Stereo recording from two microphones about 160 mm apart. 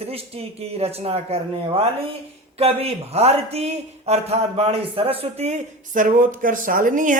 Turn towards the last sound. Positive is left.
turn(degrees=-55)  # may be behind; listen again after turning